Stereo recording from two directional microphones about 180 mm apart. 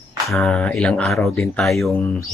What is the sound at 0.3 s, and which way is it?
Speech, 5° left (ahead or behind).